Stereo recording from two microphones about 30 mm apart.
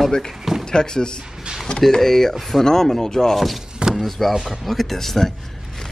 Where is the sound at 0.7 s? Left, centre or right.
Left.